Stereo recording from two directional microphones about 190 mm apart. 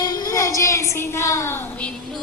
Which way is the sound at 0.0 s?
15° left (ahead or behind).